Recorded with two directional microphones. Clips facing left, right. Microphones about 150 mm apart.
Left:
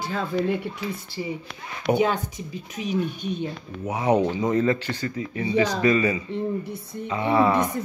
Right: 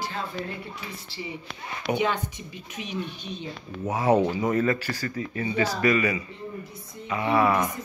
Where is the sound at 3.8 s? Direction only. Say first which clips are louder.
Even; 15° left (ahead or behind).